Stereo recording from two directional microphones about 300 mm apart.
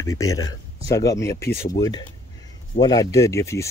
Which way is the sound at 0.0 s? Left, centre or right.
Centre.